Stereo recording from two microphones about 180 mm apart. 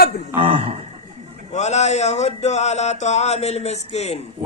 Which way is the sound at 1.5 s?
40° left (ahead or behind).